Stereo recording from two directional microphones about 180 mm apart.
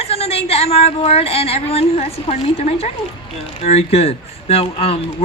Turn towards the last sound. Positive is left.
turn(degrees=35)  # may be behind; listen again after turning